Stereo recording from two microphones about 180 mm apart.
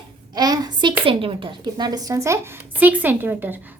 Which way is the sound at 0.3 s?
20° right (ahead or behind).